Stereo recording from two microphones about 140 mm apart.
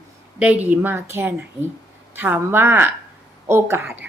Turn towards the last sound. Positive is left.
turn(degrees=-15)  # may be behind; listen again after turning